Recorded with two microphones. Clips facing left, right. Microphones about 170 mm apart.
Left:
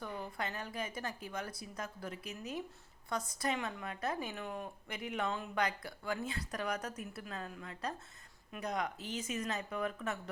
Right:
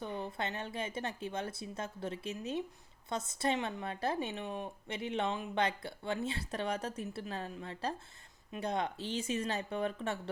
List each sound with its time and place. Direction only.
0.0 s speech: 25° right (ahead or behind)